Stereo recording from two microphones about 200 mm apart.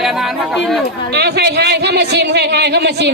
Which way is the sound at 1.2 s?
55° right (ahead or behind).